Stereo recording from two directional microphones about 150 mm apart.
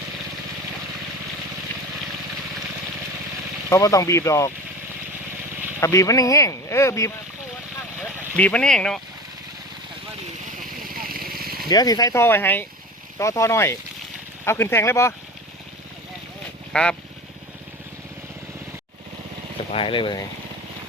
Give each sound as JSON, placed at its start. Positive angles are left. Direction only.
{"t": 3.7, "sound": "speech", "side_deg": 20}
{"t": 5.8, "sound": "speech", "side_deg": 20}
{"t": 8.4, "sound": "speech", "side_deg": 10}
{"t": 10.6, "sound": "vehicle", "side_deg": -75}
{"t": 11.7, "sound": "speech", "side_deg": 25}
{"t": 16.7, "sound": "speech", "side_deg": 5}
{"t": 19.7, "sound": "speech", "side_deg": 35}